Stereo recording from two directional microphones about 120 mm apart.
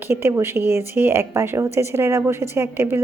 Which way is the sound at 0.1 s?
20° right (ahead or behind).